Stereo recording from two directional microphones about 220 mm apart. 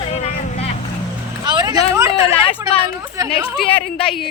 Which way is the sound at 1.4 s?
20° right (ahead or behind).